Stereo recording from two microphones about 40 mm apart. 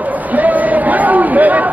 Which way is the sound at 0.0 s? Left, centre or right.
Right.